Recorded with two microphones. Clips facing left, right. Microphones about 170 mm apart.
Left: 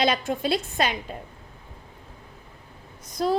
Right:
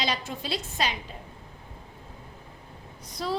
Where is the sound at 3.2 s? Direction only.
50° left (ahead or behind).